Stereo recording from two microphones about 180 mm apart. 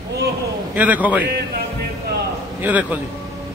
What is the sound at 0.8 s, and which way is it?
Speech, 10° right (ahead or behind).